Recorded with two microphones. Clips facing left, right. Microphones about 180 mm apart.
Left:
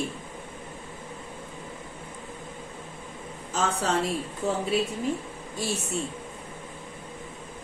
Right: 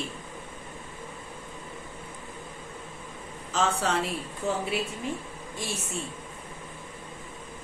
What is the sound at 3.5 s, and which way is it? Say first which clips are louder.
Speech: even; 40° left (ahead or behind).